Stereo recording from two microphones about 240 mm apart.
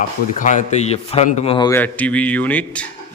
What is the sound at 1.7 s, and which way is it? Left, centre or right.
A man's voice, centre.